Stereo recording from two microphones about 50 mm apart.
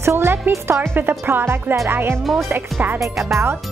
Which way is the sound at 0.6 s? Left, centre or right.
Right.